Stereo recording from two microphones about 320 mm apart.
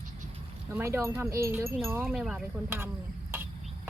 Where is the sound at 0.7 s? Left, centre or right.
Centre.